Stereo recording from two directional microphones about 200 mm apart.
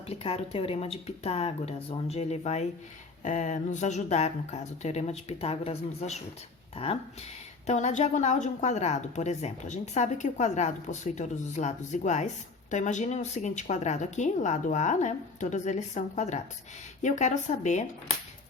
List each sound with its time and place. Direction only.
0.1 s a woman's voice: 30° left (ahead or behind)